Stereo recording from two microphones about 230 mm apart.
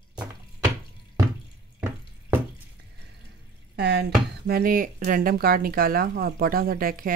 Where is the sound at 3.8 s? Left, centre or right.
Right.